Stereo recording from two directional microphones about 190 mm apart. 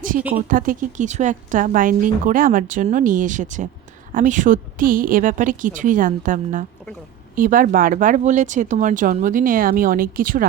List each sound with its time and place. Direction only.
0.4 s speech: 45° right (ahead or behind)